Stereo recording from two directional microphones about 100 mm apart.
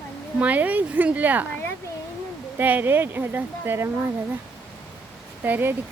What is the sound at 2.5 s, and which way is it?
Speech, 20° right (ahead or behind).